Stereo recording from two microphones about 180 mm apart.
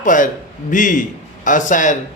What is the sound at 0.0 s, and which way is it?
A man's voice, 45° left (ahead or behind).